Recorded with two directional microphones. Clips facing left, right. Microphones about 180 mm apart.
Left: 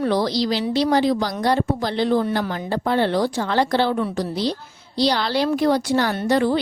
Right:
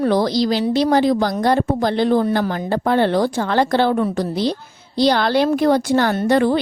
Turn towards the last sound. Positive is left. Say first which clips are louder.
# right 3 dB
turn(degrees=-55)  # may be behind; listen again after turning